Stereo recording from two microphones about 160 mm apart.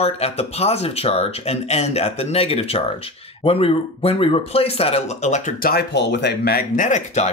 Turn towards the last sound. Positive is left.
turn(degrees=45)  # may be behind; listen again after turning